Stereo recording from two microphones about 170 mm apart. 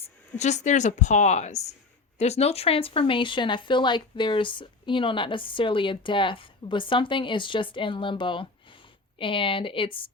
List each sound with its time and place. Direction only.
0.0 s speech: 40° left (ahead or behind)